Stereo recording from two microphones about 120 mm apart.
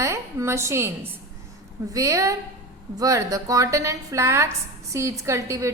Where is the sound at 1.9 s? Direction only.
25° right (ahead or behind).